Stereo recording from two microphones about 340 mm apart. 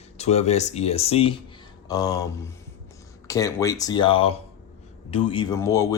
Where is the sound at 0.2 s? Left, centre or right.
Centre.